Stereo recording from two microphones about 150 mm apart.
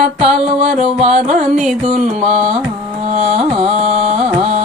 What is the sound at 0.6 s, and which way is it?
Music, 50° right (ahead or behind).